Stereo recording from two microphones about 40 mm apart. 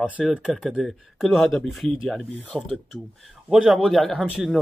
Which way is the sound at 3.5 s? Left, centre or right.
Centre.